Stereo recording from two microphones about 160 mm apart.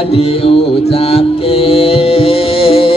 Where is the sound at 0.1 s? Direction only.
35° left (ahead or behind).